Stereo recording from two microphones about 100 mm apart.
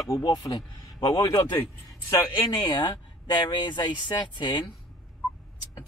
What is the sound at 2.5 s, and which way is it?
Speech, 45° left (ahead or behind).